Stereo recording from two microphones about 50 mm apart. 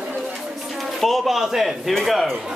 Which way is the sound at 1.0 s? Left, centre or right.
Centre.